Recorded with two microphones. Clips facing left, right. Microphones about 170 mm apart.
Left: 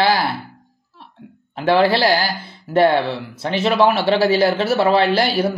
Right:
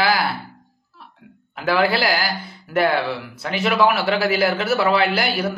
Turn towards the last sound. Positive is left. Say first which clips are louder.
# left 4 dB
turn(degrees=30)  # may be behind; listen again after turning